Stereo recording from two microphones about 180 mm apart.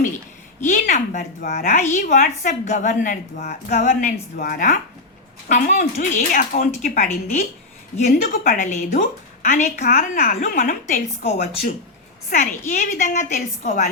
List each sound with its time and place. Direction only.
0.6 s a woman's voice: 45° left (ahead or behind)
1.8 s a woman's voice: 40° left (ahead or behind)
11.2 s a woman's voice: 35° left (ahead or behind)